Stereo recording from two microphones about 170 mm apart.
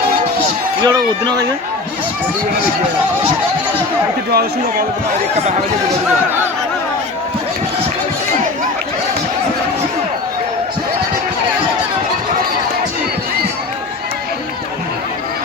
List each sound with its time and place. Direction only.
0.8 s speech: 25° right (ahead or behind)